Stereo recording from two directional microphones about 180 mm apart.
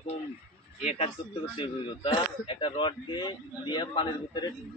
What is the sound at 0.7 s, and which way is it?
Speech, 35° left (ahead or behind).